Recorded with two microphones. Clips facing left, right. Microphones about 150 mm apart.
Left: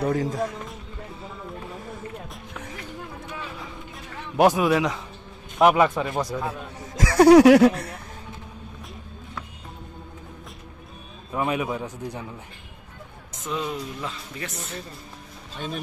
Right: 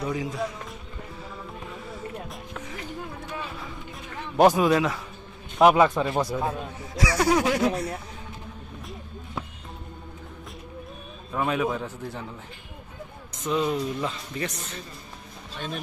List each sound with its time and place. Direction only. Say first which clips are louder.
0.0 s speech: left 4 dB; 45° left (ahead or behind)
4.4 s speech: even; 5° left (ahead or behind)
7.0 s speech: left 10 dB; 65° left (ahead or behind)
11.3 s a man's voice: even; 10° left (ahead or behind)
13.3 s speech: right 4 dB; centre (ahead or behind)
15.5 s speech: left 2 dB; 5° left (ahead or behind)